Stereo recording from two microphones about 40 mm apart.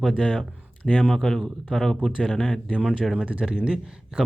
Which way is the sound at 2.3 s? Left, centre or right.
Left.